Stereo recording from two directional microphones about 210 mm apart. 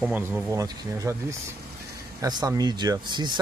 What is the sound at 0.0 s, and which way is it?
Speech, 10° right (ahead or behind).